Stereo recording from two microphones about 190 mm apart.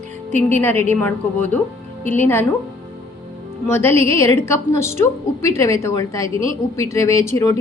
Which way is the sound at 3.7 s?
15° left (ahead or behind).